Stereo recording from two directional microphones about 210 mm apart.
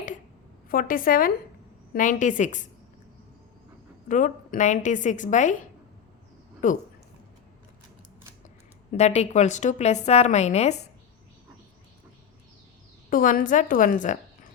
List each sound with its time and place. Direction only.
0.7 s a woman's voice: 40° left (ahead or behind)
4.1 s a woman's voice: 35° left (ahead or behind)
6.6 s a woman's voice: 40° left (ahead or behind)
8.9 s a woman's voice: 30° left (ahead or behind)
13.1 s a woman's voice: 40° left (ahead or behind)